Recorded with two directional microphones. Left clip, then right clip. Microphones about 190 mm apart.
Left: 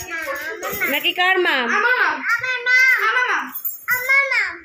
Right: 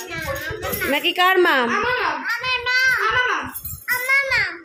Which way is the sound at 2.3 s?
30° right (ahead or behind).